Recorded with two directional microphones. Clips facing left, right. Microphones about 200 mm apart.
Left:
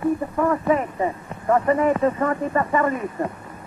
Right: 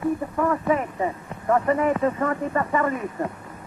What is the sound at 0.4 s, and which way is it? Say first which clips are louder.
Speech: left 2 dB; 35° left (ahead or behind).